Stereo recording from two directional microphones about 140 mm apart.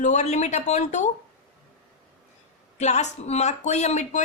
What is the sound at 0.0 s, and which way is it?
Speech, 55° left (ahead or behind).